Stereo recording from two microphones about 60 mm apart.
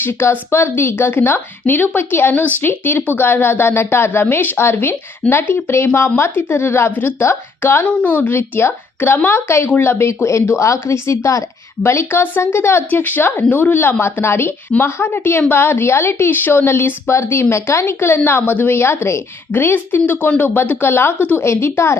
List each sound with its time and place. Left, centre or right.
0.0 s a woman's voice: left
6.9 s a woman's voice: left
7.2 s a woman's voice: left
7.8 s a woman's voice: left
8.1 s speech: left
9.1 s a woman's voice: left
12.9 s a woman's voice: left
19.5 s a woman's voice: left